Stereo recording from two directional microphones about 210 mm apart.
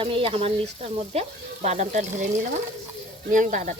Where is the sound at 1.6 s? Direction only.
30° right (ahead or behind).